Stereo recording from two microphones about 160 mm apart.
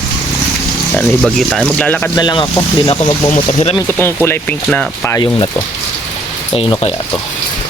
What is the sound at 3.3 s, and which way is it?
Speech, 40° left (ahead or behind).